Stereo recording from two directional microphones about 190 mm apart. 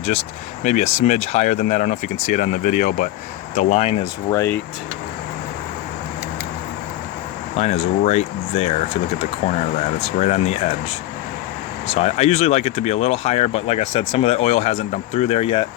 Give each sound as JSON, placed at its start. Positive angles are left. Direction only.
{"t": 0.6, "sound": "speech", "side_deg": 40}
{"t": 4.3, "sound": "speech", "side_deg": 15}
{"t": 7.5, "sound": "speech", "side_deg": 35}
{"t": 10.2, "sound": "speech", "side_deg": 35}
{"t": 11.9, "sound": "speech", "side_deg": 35}